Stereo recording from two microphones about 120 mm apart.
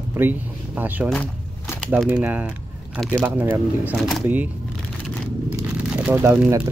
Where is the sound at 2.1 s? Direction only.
10° right (ahead or behind).